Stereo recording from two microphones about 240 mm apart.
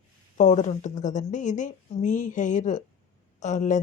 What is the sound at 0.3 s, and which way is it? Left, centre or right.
A woman's voice, left.